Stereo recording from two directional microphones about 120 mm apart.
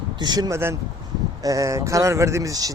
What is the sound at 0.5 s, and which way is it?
Speech, 20° right (ahead or behind).